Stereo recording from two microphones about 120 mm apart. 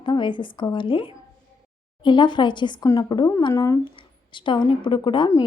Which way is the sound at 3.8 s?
40° left (ahead or behind).